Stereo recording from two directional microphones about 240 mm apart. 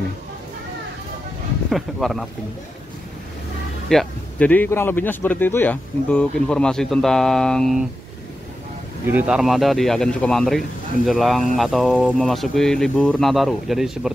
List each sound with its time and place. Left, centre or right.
1.7 s speech: centre
3.9 s speech: centre
9.0 s speech: centre